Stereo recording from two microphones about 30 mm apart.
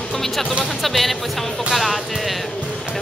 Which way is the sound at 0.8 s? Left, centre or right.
Centre.